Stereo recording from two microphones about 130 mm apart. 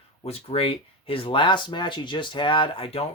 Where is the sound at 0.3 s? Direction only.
50° left (ahead or behind).